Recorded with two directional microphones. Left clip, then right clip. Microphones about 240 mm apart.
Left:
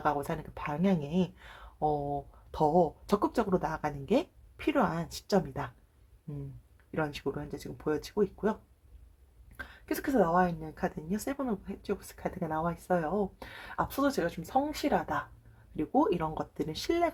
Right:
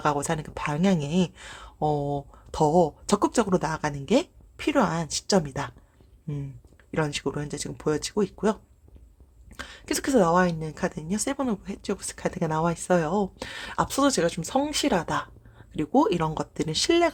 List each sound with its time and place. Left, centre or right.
0.0 s speech: right
6.9 s speech: right
9.6 s speech: right